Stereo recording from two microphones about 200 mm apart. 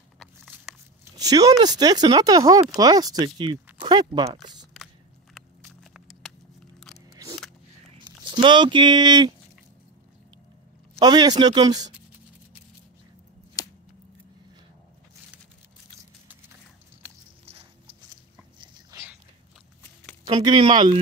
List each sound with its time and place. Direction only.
0.2 s a sound: centre (ahead or behind)
1.1 s speech: 20° right (ahead or behind)
5.3 s a sound: centre (ahead or behind)
8.0 s speech: 25° right (ahead or behind)
11.0 s speech: 20° right (ahead or behind)
13.6 s scissors: 20° left (ahead or behind)
17.5 s a sound: 30° right (ahead or behind)
18.6 s dog: 20° right (ahead or behind)
20.2 s speech: 30° right (ahead or behind)